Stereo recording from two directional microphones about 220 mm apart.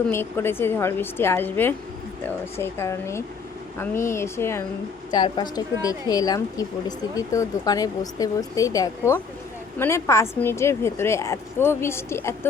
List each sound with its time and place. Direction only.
0.1 s a woman's voice: 10° left (ahead or behind)